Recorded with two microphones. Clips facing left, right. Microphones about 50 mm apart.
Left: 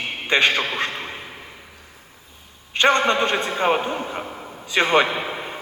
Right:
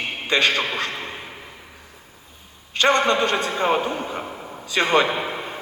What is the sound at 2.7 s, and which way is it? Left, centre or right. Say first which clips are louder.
A man's voice: left 1 dB; left.